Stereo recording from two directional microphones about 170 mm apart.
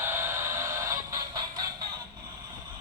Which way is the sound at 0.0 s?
15° right (ahead or behind).